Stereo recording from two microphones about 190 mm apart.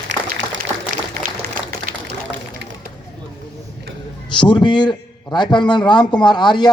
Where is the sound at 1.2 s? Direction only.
50° right (ahead or behind).